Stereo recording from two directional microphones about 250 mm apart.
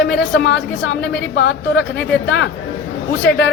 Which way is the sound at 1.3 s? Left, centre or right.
Left.